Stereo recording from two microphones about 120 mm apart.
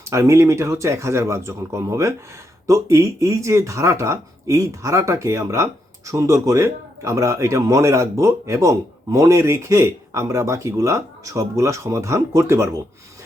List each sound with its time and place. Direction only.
0.1 s speech: 25° right (ahead or behind)